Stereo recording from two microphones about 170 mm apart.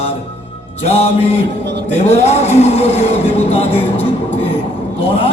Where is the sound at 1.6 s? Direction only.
80° right.